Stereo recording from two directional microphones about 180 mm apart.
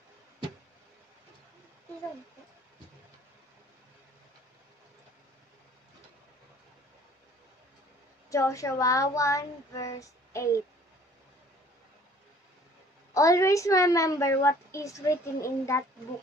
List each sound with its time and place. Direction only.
8.3 s a woman's voice: 15° left (ahead or behind)
13.1 s a woman's voice: 15° left (ahead or behind)